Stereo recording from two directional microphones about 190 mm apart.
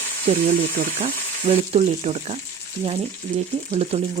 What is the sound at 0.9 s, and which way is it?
Speech, 30° right (ahead or behind).